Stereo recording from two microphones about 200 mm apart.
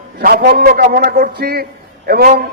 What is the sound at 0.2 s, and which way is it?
A man's voice, 50° right (ahead or behind).